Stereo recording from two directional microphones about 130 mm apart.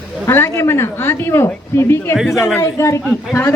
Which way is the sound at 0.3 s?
20° left (ahead or behind).